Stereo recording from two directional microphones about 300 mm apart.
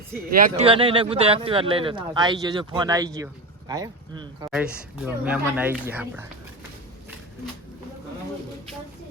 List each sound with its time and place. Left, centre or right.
0.3 s speech: right; by 6.2 s centre